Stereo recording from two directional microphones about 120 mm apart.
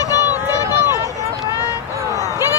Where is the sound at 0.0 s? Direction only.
30° left (ahead or behind).